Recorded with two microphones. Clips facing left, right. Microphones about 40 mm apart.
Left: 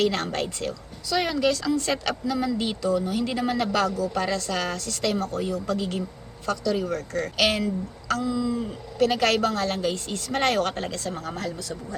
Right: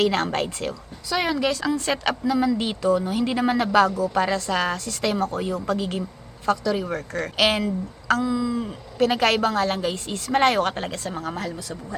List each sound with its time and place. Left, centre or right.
0.0 s a woman's voice: right
0.4 s a woman's voice: centre
8.3 s a woman's voice: centre